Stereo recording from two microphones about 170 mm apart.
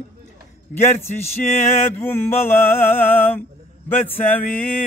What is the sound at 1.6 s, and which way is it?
Mantra, 15° left (ahead or behind).